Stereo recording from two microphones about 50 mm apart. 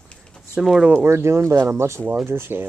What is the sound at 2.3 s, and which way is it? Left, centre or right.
Speech, right.